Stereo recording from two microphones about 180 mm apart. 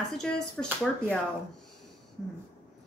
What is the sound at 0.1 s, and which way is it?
A woman's voice, 5° left (ahead or behind).